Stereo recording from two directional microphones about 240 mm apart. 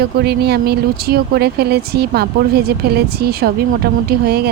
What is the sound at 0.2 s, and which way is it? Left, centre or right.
Speech, right.